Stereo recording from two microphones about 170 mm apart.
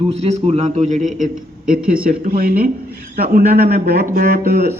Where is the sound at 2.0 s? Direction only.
60° right (ahead or behind).